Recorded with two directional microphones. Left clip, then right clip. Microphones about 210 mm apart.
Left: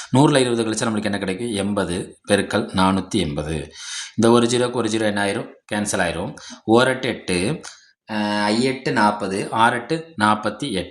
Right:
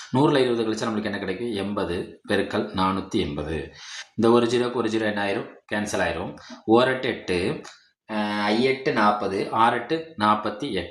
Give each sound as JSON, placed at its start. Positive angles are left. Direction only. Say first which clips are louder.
{"t": 0.1, "sound": "speech", "louder": "left 4 dB", "side_deg": 45}